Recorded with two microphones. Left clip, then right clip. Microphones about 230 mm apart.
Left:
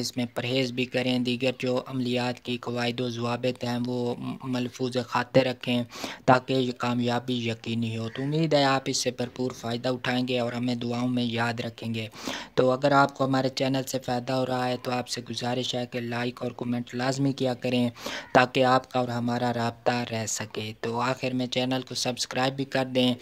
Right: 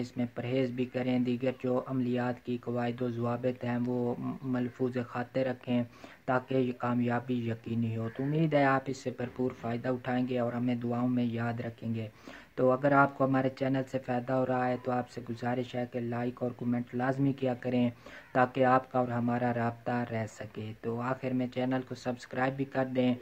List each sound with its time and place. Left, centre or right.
0.0 s speech: left